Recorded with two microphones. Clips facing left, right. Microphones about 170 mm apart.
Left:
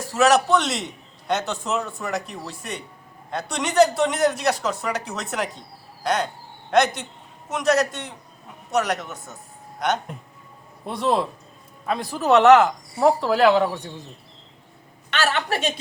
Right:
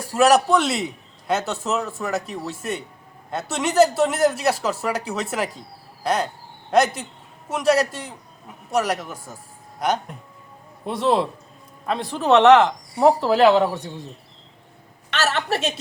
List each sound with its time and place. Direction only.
0.1 s a man's voice: 10° right (ahead or behind)
9.1 s a man's voice: 30° right (ahead or behind)
9.8 s a man's voice: 5° right (ahead or behind)
15.1 s speech: centre (ahead or behind)